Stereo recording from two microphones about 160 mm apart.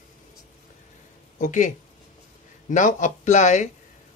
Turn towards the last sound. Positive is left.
turn(degrees=50)  # may be behind; listen again after turning